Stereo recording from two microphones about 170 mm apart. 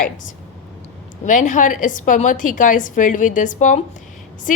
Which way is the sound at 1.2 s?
45° left (ahead or behind).